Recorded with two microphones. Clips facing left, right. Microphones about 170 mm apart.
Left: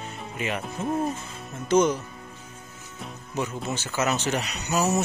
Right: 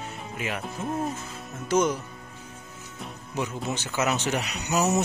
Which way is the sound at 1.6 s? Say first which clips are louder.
Left 3 dB; 10° right (ahead or behind).